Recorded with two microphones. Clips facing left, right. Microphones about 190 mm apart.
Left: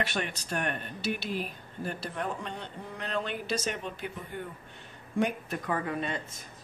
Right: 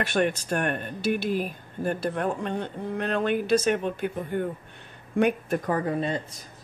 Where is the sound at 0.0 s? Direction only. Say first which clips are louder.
Right 8 dB; 50° right (ahead or behind).